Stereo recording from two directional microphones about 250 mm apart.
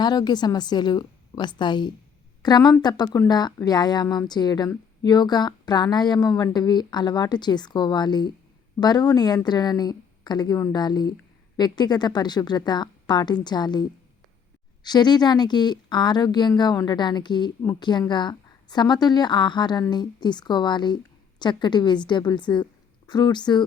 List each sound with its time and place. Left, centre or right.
0.0 s speech: centre
14.8 s speech: centre